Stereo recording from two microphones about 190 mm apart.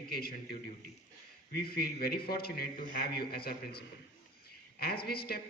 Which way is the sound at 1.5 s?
55° left (ahead or behind).